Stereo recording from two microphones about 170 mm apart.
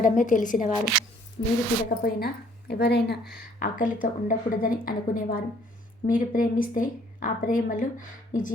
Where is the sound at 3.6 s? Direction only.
50° left (ahead or behind).